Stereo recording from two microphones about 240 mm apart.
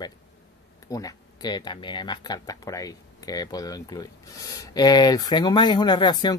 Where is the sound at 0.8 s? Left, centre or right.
Centre.